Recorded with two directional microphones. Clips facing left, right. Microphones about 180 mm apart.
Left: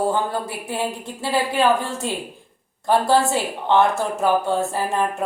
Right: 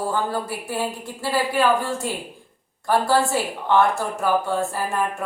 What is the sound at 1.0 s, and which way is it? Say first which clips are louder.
Speech: left 1 dB; 20° left (ahead or behind).